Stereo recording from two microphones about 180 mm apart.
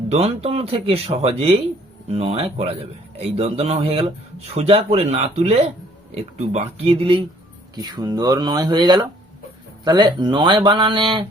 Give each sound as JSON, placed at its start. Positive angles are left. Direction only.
{"t": 0.1, "sound": "speech", "side_deg": -35}